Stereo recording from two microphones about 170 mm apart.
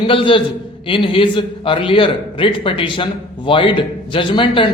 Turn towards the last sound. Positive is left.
turn(degrees=30)  # may be behind; listen again after turning